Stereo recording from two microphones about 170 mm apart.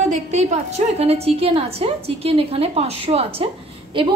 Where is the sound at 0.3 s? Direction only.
40° right (ahead or behind).